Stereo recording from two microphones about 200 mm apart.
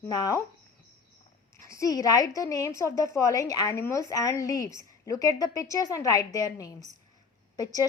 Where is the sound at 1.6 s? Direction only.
15° left (ahead or behind).